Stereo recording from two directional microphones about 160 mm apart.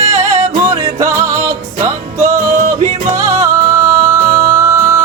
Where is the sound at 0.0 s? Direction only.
45° right (ahead or behind).